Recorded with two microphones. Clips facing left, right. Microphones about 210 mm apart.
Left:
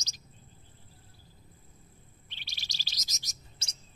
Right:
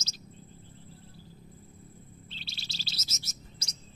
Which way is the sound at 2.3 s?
15° left (ahead or behind).